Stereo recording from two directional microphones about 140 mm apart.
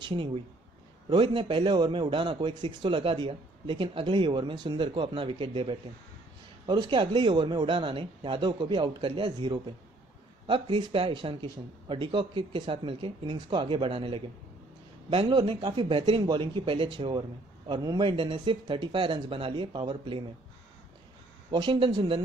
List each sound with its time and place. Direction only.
0.0 s a man's voice: 35° right (ahead or behind)
21.5 s a man's voice: 35° right (ahead or behind)